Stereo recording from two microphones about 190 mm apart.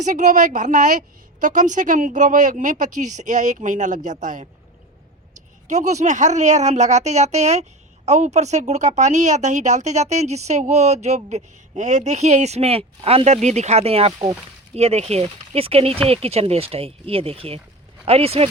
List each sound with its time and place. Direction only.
0.0 s speech: 40° right (ahead or behind)
5.6 s speech: 40° right (ahead or behind)